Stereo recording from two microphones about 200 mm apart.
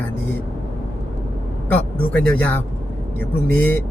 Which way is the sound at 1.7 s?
10° left (ahead or behind).